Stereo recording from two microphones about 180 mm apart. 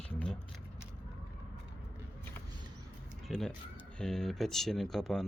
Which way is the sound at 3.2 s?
Centre (ahead or behind).